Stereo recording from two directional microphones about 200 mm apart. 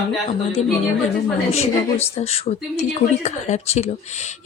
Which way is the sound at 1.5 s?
30° left (ahead or behind).